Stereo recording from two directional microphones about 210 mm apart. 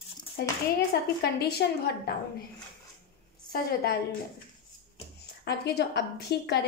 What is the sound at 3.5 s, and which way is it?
Speech, 45° left (ahead or behind).